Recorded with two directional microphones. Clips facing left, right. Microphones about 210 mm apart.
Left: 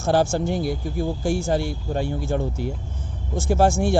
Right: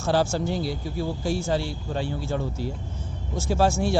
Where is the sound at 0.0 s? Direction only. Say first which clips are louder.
Left 3 dB; 50° left (ahead or behind).